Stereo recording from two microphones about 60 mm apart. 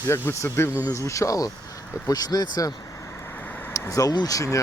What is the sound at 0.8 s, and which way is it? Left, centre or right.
Speech, left.